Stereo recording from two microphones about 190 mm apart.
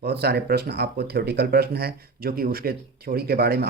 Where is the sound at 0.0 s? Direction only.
55° right (ahead or behind).